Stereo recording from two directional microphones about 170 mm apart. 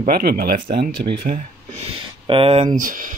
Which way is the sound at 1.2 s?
45° right (ahead or behind).